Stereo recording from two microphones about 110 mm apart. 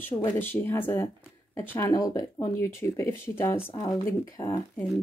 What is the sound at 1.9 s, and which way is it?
Speech, 35° left (ahead or behind).